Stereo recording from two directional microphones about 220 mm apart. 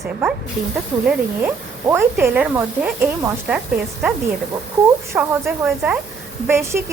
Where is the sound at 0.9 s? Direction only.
20° right (ahead or behind).